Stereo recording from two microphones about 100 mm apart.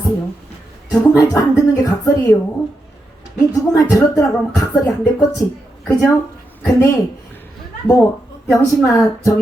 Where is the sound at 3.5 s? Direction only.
40° left (ahead or behind).